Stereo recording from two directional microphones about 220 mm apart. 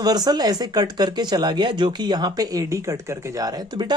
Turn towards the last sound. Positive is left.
turn(degrees=-20)  # may be behind; listen again after turning